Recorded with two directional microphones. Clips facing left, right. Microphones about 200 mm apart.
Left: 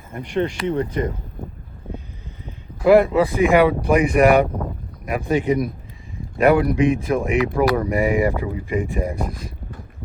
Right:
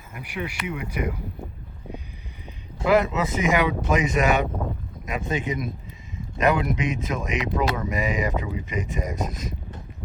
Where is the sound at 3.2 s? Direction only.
20° right (ahead or behind).